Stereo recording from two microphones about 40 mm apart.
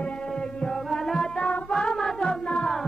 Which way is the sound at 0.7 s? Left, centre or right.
Centre.